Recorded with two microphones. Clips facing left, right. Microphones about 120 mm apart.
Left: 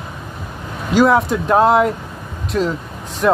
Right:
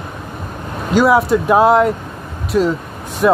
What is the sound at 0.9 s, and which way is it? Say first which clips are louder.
Speech: right 1 dB; 5° right (ahead or behind).